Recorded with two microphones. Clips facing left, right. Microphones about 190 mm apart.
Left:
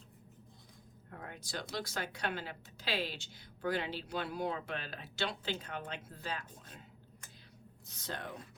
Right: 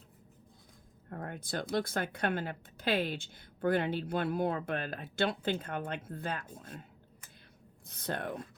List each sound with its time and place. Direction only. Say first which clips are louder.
1.1 s speech: right 6 dB; 50° right (ahead or behind)
7.9 s speech: right 7 dB; 55° right (ahead or behind)